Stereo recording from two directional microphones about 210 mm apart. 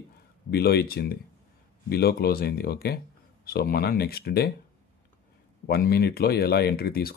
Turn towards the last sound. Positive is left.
turn(degrees=45)  # may be behind; listen again after turning